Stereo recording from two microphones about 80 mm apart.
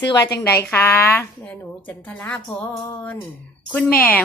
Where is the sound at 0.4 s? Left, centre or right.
Left.